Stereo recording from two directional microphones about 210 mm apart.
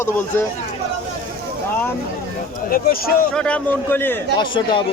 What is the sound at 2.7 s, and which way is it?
Speech, 45° left (ahead or behind).